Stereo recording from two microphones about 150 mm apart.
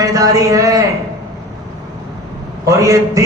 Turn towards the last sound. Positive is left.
turn(degrees=-20)  # may be behind; listen again after turning